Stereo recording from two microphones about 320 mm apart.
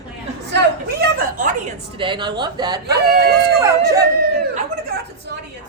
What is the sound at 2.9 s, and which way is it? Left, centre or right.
Speech, right.